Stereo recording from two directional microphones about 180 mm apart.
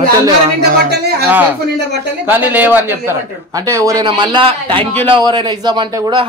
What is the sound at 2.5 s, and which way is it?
A man's voice, 10° right (ahead or behind).